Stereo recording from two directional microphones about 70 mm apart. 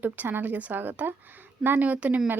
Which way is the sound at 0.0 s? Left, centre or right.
Right.